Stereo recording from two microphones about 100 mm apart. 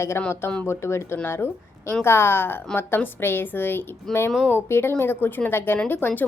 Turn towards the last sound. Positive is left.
turn(degrees=20)  # may be behind; listen again after turning